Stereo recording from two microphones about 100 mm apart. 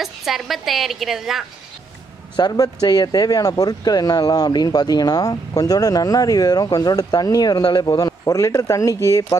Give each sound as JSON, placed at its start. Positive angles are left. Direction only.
{"t": 0.0, "sound": "a woman's voice", "side_deg": 0}
{"t": 2.3, "sound": "speech", "side_deg": 45}